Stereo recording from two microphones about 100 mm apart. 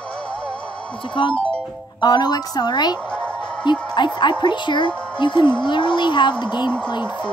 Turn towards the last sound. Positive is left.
turn(degrees=50)  # may be behind; listen again after turning